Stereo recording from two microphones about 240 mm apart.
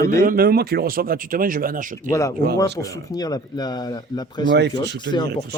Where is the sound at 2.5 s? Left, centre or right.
Centre.